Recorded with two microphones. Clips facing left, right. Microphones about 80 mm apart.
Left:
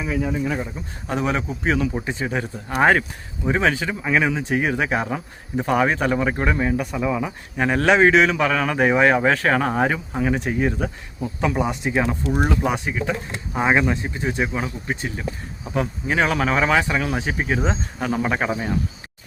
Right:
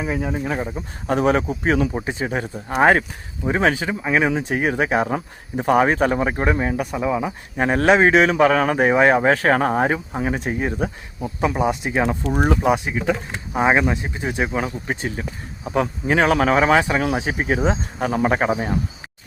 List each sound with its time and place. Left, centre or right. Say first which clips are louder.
0.0 s speech: even; right
0.3 s speech: right 1 dB; right
1.9 s speech: right 1 dB; centre
4.3 s speech: right 1 dB; right
8.1 s speech: right 3 dB; right
11.5 s speech: right 1 dB; centre; by 15.2 s right
15.7 s speech: right 3 dB; right